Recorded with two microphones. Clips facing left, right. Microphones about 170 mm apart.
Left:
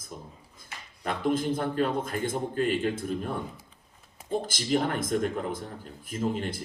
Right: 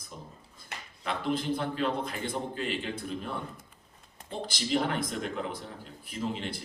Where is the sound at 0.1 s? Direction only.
45° left (ahead or behind).